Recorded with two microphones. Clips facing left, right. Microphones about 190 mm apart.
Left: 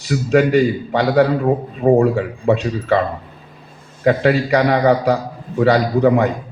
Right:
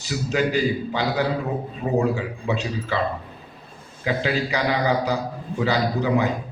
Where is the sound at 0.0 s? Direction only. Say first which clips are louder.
Left 8 dB; 60° left (ahead or behind).